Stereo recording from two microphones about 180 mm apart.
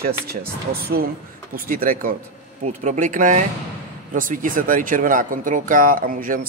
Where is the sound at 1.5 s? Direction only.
50° right (ahead or behind).